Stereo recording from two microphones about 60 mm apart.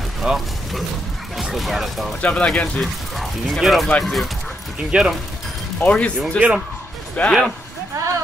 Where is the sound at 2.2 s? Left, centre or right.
Left.